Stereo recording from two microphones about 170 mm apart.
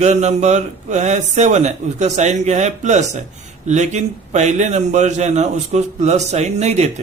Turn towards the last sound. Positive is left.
turn(degrees=-40)  # may be behind; listen again after turning